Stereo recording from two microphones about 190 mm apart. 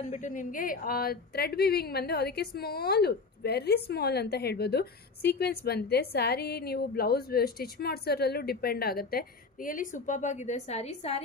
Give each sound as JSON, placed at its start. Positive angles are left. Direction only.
{"t": 0.1, "sound": "a woman's voice", "side_deg": 40}